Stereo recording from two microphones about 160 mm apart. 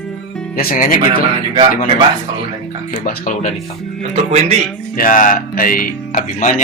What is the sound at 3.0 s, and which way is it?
Speech, 55° left (ahead or behind).